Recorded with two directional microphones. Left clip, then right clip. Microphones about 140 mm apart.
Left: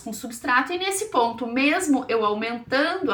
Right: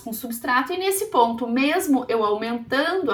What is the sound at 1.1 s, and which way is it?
A woman's voice, 35° right (ahead or behind).